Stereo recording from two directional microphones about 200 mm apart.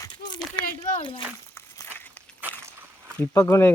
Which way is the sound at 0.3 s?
20° left (ahead or behind).